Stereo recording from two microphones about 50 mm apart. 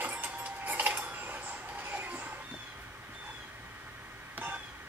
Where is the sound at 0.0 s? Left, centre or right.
Right.